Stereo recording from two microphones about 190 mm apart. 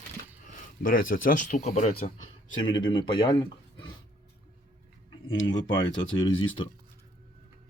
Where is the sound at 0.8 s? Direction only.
50° left (ahead or behind).